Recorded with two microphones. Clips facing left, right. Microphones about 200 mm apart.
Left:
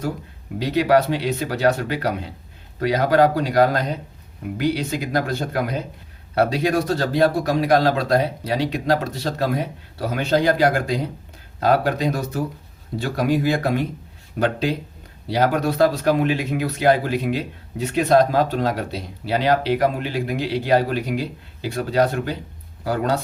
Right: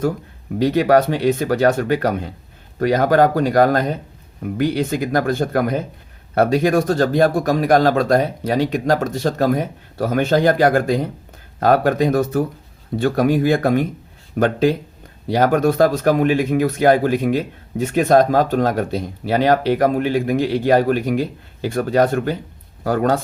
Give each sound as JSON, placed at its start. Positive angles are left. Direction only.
{"t": 0.6, "sound": "speech", "side_deg": -50}